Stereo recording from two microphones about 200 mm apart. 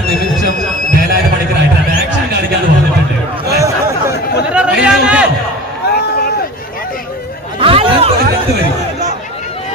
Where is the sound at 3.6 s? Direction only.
10° right (ahead or behind).